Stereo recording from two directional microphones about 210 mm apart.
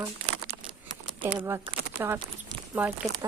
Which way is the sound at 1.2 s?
10° right (ahead or behind).